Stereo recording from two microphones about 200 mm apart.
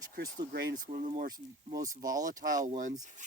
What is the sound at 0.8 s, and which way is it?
Speech, 40° right (ahead or behind).